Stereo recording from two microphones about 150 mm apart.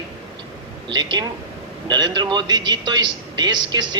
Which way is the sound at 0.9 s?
30° right (ahead or behind).